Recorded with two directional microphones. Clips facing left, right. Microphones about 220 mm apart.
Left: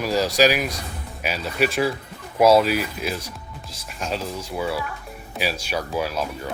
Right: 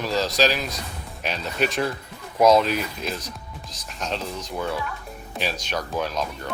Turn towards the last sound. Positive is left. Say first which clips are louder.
# left 1 dB
turn(degrees=5)  # may be behind; listen again after turning